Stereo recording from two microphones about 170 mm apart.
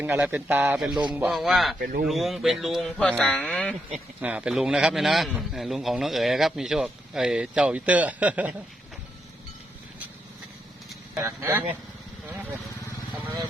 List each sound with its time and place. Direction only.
0.0 s a man's voice: 10° right (ahead or behind)
1.8 s speech: 60° right (ahead or behind)
2.0 s a man's voice: centre (ahead or behind)
4.2 s a man's voice: 5° right (ahead or behind)
11.1 s a man's voice: 15° right (ahead or behind)